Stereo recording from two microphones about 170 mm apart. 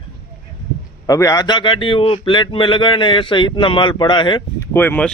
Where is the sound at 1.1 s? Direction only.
20° left (ahead or behind).